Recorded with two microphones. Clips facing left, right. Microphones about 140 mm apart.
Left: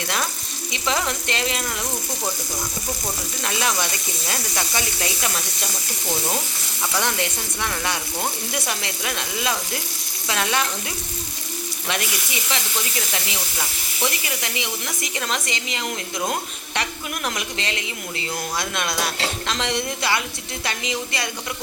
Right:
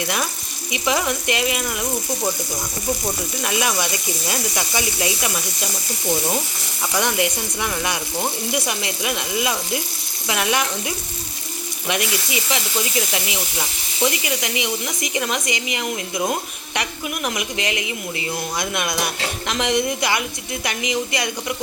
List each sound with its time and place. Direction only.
0.7 s speech: 15° right (ahead or behind)
3.4 s speech: 15° right (ahead or behind)
6.9 s speech: 15° right (ahead or behind)